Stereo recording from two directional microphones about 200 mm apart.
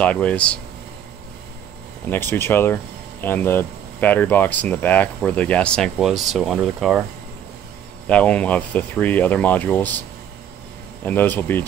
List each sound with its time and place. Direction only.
0.0 s speech: 5° left (ahead or behind)
2.0 s speech: 10° left (ahead or behind)
8.1 s speech: 5° left (ahead or behind)
11.1 s speech: 10° left (ahead or behind)